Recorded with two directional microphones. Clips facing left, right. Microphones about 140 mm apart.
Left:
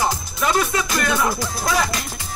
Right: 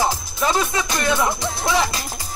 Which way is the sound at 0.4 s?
25° right (ahead or behind).